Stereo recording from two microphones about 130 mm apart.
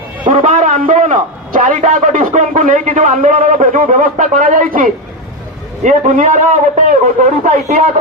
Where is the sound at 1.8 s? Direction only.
80° right.